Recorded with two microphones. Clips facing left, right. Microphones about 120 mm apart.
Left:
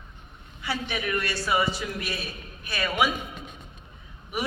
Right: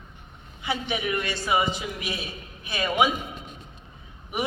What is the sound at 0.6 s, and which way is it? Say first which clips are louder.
A woman's voice: right 2 dB; 20° right (ahead or behind).